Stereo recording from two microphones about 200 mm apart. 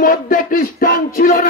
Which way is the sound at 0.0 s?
45° left (ahead or behind).